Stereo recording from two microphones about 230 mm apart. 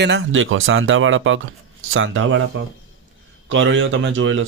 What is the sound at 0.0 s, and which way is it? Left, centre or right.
Speech, right.